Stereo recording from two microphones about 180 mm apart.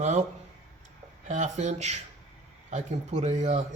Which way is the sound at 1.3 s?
40° right (ahead or behind).